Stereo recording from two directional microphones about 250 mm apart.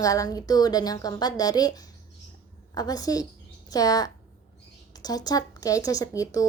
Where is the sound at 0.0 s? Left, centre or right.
Centre.